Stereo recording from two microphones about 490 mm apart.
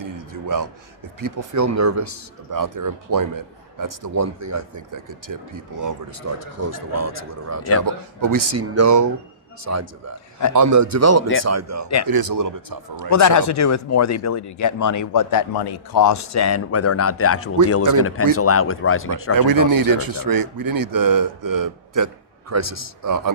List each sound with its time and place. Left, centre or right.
0.0 s a sound: right
1.2 s speech: right
12.0 s speech: right
13.0 s speech: left
19.3 s speech: right